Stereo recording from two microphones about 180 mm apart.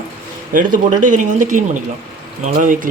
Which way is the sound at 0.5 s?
45° right (ahead or behind).